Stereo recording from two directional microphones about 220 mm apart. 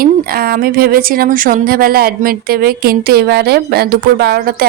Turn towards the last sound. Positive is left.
turn(degrees=-45)  # may be behind; listen again after turning